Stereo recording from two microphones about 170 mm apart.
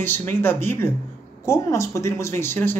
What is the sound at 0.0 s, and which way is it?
Speech, 10° left (ahead or behind).